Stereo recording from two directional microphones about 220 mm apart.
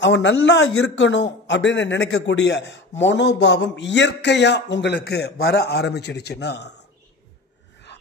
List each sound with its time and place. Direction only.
0.0 s a man's voice: 55° left (ahead or behind)
7.9 s dog: 50° left (ahead or behind)